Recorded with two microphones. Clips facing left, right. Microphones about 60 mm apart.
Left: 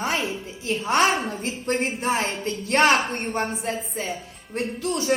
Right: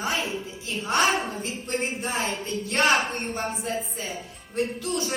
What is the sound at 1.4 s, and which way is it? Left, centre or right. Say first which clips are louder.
A woman's voice: left 4 dB; left.